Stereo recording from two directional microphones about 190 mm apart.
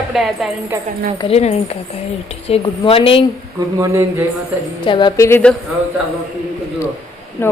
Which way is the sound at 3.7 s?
15° right (ahead or behind).